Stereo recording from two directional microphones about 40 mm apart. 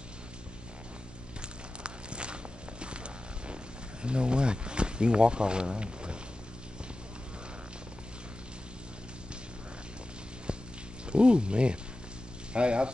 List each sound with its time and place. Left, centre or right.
1.8 s walk: right
4.0 s speech: right
10.5 s a sound: right
11.1 s speech: right